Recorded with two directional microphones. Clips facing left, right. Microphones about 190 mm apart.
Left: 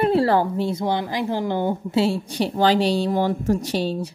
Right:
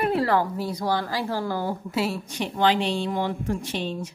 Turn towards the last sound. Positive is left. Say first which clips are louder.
# left 6 dB
turn(degrees=35)  # may be behind; listen again after turning